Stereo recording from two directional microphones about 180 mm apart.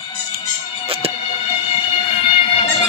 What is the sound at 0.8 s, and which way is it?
Music, 30° right (ahead or behind).